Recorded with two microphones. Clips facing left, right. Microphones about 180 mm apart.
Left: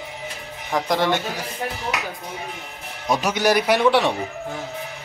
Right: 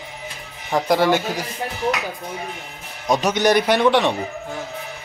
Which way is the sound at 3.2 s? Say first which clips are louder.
Right 2 dB; 5° left (ahead or behind).